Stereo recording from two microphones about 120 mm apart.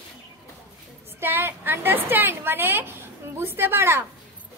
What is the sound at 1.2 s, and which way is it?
A woman's voice, 20° right (ahead or behind).